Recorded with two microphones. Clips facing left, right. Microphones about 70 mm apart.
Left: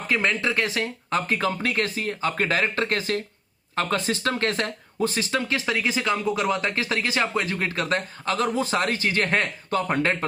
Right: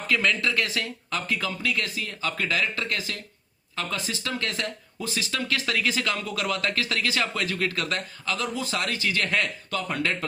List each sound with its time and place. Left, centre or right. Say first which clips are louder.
0.1 s speech: left 1 dB; left